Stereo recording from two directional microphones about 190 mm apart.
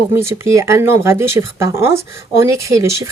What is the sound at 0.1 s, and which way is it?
Speech, 15° right (ahead or behind).